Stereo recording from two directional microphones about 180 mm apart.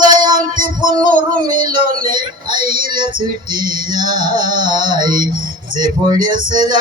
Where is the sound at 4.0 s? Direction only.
25° right (ahead or behind).